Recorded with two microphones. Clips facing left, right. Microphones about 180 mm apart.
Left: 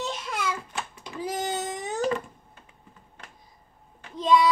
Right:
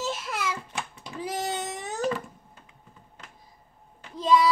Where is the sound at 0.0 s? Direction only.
5° right (ahead or behind).